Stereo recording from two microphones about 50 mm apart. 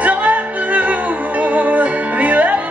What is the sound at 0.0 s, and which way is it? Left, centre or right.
Music, right.